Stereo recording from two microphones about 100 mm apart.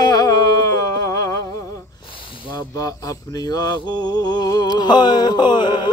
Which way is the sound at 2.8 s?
35° left (ahead or behind).